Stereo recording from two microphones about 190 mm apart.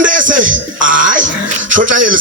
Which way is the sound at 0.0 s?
45° right (ahead or behind).